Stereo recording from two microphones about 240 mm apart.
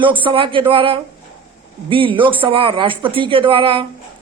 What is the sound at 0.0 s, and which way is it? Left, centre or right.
Speech, right.